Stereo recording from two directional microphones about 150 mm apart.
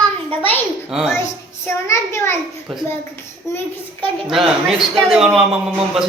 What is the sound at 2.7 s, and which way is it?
Speech, centre (ahead or behind).